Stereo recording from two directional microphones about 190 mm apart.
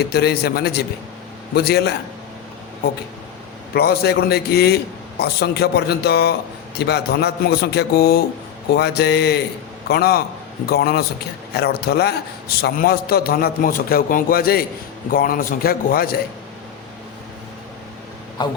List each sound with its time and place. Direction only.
0.0 s a man's voice: 55° left (ahead or behind)
3.8 s a man's voice: 55° left (ahead or behind)
18.4 s a sound: 25° left (ahead or behind)